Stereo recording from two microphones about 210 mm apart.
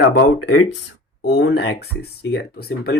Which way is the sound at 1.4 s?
50° left (ahead or behind).